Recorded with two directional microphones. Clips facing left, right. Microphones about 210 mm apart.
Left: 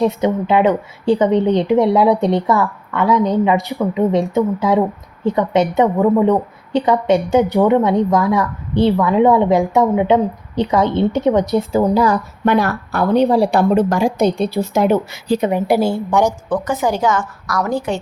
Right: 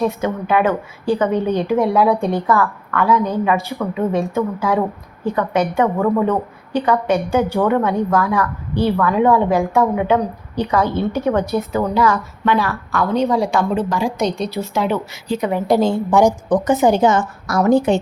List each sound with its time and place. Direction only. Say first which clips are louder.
0.0 s a woman's voice: left 4 dB; 15° left (ahead or behind); by 13.7 s 35° left (ahead or behind)
13.7 s speech: left 5 dB; 45° left (ahead or behind)
15.4 s a woman's voice: right 1 dB; 15° left (ahead or behind); by 16.2 s centre (ahead or behind)
16.2 s a woman's voice: right 3 dB; 15° right (ahead or behind)